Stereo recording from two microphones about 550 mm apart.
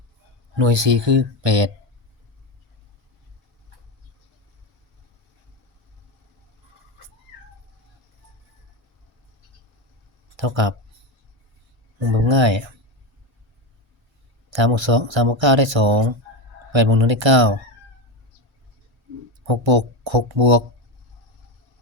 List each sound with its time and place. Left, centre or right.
0.5 s speech: right
10.3 s speech: right
11.9 s speech: right
14.5 s speech: right
19.5 s speech: right